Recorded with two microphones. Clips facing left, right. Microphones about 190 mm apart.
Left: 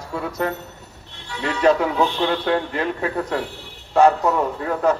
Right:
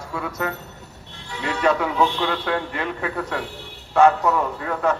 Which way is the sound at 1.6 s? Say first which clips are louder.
Left 3 dB; 35° left (ahead or behind).